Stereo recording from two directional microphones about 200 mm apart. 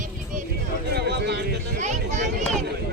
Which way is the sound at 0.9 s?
55° right (ahead or behind).